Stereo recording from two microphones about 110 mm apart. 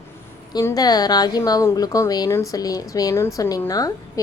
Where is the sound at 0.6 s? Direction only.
35° left (ahead or behind).